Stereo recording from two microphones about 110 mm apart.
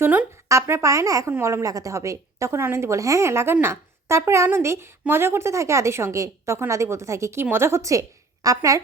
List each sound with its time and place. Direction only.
0.0 s a woman's voice: 15° right (ahead or behind)
0.4 s a woman's voice: 30° right (ahead or behind)